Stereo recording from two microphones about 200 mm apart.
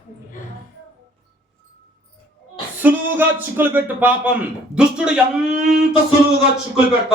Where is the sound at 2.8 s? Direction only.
10° right (ahead or behind).